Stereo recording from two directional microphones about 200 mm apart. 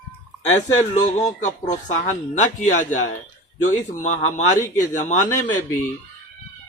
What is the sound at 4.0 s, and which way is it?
Speech, 40° left (ahead or behind).